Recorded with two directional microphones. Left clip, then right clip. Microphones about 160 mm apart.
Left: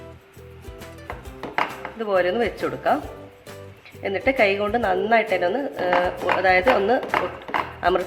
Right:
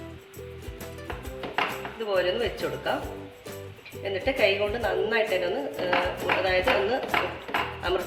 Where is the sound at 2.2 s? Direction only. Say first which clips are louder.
Left 5 dB; 50° left (ahead or behind).